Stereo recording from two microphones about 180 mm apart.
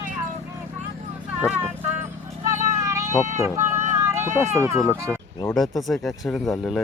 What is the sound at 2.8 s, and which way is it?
Sheep, 15° right (ahead or behind).